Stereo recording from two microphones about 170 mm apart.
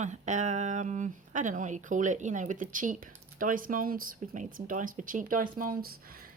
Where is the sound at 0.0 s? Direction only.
45° right (ahead or behind).